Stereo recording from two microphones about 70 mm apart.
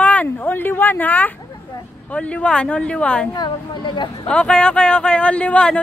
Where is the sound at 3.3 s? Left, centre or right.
Left.